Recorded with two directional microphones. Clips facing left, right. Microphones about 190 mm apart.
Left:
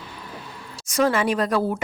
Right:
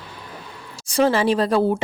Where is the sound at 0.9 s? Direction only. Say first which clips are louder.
Right 3 dB; 30° right (ahead or behind).